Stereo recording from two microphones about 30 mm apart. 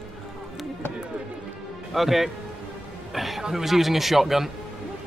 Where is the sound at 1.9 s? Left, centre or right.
Centre.